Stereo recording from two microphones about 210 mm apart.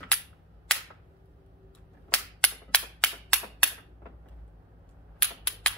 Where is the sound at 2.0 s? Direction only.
5° left (ahead or behind).